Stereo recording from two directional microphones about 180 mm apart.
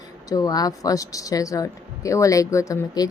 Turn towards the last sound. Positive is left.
turn(degrees=20)  # may be behind; listen again after turning